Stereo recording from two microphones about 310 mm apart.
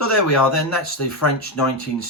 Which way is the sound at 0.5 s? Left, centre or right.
Left.